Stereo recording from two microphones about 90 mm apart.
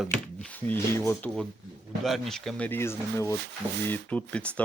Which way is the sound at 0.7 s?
25° left (ahead or behind).